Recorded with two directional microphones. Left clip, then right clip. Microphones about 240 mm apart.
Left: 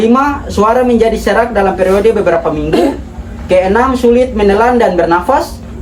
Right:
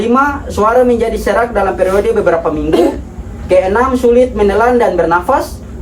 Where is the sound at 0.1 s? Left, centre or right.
Left.